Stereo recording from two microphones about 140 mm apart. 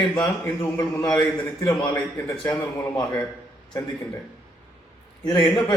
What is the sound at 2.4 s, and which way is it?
Speech, 15° left (ahead or behind).